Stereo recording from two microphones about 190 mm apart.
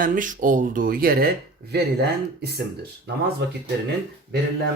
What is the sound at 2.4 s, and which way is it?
Speech, 60° right (ahead or behind).